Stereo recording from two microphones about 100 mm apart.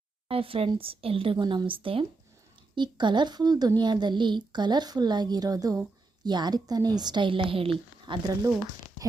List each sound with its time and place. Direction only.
0.3 s speech: 70° right (ahead or behind)
2.7 s a woman's voice: 50° right (ahead or behind)